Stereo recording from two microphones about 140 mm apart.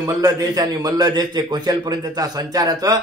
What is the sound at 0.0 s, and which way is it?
A man's voice, 25° right (ahead or behind).